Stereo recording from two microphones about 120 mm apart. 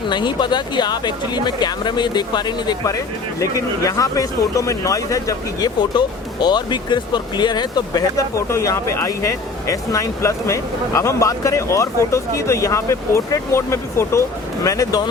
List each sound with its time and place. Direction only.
0.1 s speech: 40° left (ahead or behind)